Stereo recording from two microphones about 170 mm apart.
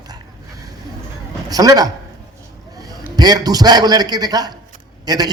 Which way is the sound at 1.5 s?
20° right (ahead or behind).